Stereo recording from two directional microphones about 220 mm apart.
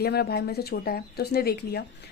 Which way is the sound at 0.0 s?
45° left (ahead or behind).